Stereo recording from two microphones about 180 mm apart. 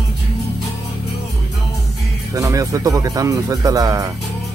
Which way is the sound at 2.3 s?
20° right (ahead or behind).